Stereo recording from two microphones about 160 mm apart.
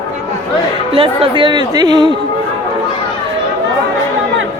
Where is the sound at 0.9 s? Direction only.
35° right (ahead or behind).